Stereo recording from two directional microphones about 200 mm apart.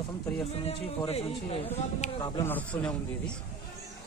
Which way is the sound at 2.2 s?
20° left (ahead or behind).